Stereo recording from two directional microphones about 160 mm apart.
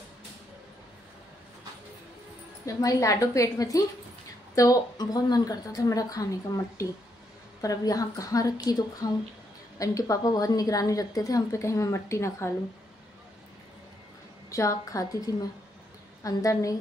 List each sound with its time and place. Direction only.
2.6 s a woman's voice: 20° left (ahead or behind)
14.5 s a woman's voice: 20° left (ahead or behind)